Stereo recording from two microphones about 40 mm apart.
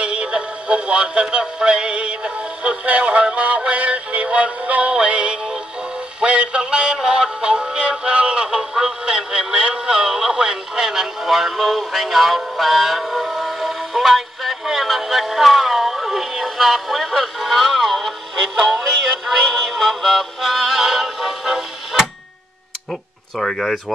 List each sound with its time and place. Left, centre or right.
0.0 s synthetic singing: right
6.2 s music: right
7.1 s synthetic singing: right
8.5 s a sound: centre
12.5 s music: centre
23.4 s speech: centre